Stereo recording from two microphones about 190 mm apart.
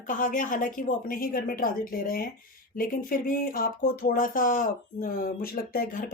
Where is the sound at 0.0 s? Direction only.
45° left (ahead or behind).